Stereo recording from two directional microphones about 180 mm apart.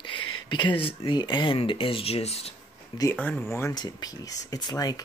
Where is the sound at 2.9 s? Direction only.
20° left (ahead or behind).